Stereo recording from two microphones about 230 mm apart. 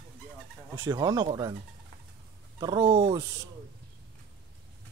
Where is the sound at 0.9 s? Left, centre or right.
Centre.